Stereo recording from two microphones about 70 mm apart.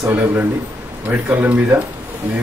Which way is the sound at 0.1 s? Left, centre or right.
Right.